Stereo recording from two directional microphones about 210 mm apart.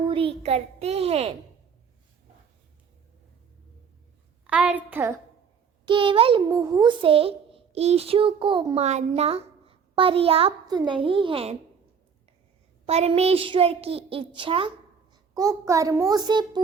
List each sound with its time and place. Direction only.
0.1 s a child's voice: 25° right (ahead or behind)
4.4 s a child's voice: 5° right (ahead or behind)
5.8 s a child's voice: 25° right (ahead or behind)
12.8 s a child's voice: 30° right (ahead or behind)